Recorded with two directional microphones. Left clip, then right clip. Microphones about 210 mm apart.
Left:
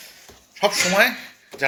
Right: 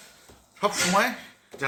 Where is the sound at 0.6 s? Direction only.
15° right (ahead or behind).